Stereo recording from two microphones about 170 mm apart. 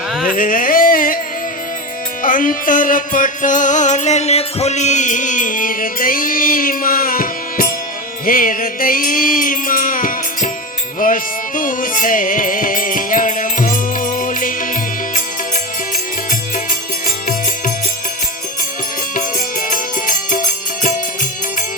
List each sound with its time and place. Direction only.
0.3 s music: 55° left (ahead or behind)
2.2 s music: 50° left (ahead or behind)
19.7 s music: 55° left (ahead or behind)